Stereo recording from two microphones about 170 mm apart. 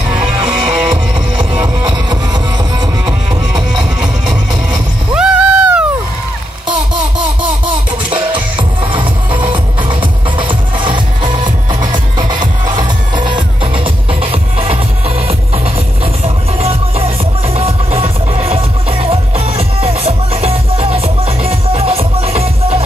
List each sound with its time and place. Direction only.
0.1 s music: 30° right (ahead or behind)
1.5 s music: 10° right (ahead or behind)
1.9 s music: 25° right (ahead or behind)
3.7 s music: 5° right (ahead or behind)
5.1 s a sound: 5° right (ahead or behind)
8.1 s music: 30° right (ahead or behind)